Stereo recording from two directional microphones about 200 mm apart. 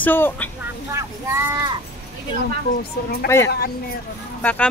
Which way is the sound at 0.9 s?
15° right (ahead or behind).